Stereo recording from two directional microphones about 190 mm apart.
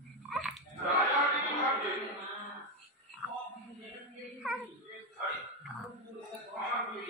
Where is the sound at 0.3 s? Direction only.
Centre (ahead or behind).